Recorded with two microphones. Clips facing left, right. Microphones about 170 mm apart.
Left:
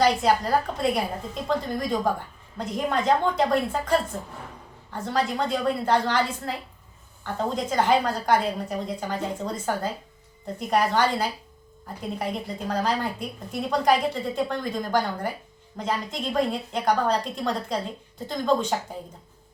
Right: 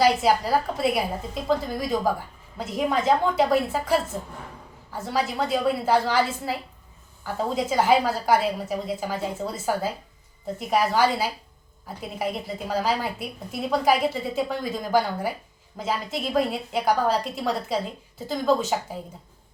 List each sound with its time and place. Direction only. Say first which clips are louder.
0.0 s a woman's voice: right 1 dB; 5° right (ahead or behind)